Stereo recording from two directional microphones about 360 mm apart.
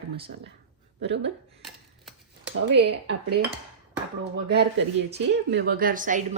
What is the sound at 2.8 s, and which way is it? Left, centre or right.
Speech, right.